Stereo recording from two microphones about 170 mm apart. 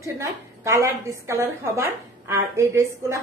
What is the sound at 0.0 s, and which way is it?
A woman's voice, 20° right (ahead or behind).